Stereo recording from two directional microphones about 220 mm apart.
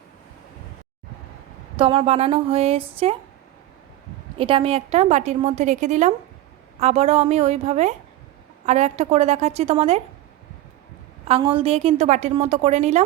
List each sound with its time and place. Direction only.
1.8 s a woman's voice: 25° right (ahead or behind)
4.4 s a woman's voice: 25° right (ahead or behind)
11.3 s a woman's voice: 25° right (ahead or behind)